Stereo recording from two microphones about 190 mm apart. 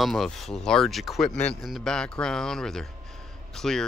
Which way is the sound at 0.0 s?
Centre (ahead or behind).